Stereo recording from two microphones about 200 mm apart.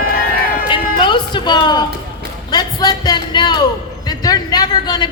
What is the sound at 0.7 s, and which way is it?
Music, 25° left (ahead or behind).